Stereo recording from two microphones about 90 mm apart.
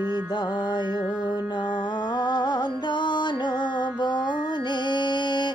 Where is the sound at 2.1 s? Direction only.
50° left (ahead or behind).